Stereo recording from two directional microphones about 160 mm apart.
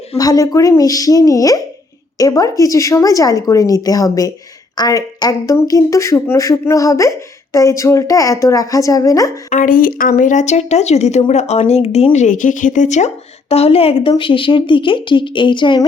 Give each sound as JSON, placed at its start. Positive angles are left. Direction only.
{"t": 0.2, "sound": "speech", "side_deg": 20}
{"t": 9.5, "sound": "a woman's voice", "side_deg": 55}